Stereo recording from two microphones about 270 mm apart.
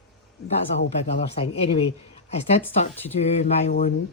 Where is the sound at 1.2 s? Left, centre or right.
Left.